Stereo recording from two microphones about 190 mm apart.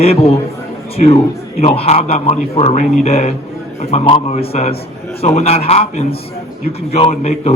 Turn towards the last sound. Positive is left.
turn(degrees=35)  # may be behind; listen again after turning